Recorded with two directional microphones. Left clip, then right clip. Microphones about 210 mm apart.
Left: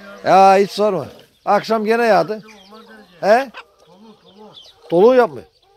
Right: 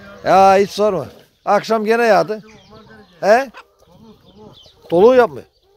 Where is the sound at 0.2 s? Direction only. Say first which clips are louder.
Even; 10° right (ahead or behind); by 3.0 s 30° right (ahead or behind).